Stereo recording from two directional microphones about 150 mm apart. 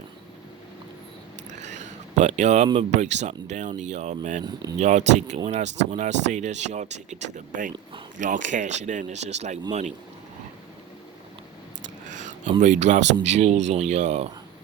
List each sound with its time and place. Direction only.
1.5 s a sound: 55° right (ahead or behind)
2.7 s speech: 50° right (ahead or behind)
12.5 s speech: 55° right (ahead or behind)